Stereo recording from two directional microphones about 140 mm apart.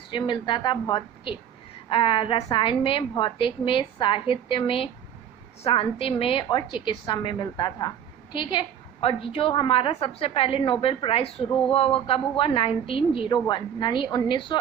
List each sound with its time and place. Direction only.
0.1 s a woman's voice: 35° left (ahead or behind)